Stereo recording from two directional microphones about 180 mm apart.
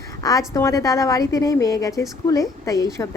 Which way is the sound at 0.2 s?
20° left (ahead or behind).